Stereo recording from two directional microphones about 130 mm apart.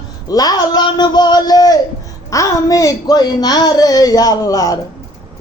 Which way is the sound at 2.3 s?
25° left (ahead or behind).